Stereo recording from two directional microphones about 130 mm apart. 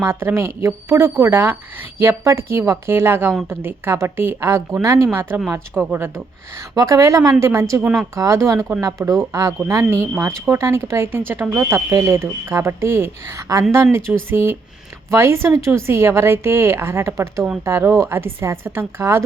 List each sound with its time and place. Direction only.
0.0 s speech: 20° right (ahead or behind)
6.7 s speech: 25° right (ahead or behind)
7.8 s speech: 5° right (ahead or behind)
8.1 s speech: 25° right (ahead or behind)